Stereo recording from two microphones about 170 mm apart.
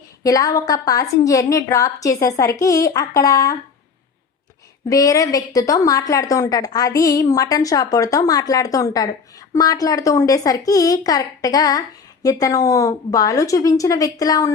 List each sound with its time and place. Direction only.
0.2 s a woman's voice: 20° left (ahead or behind)
4.9 s a woman's voice: 20° left (ahead or behind)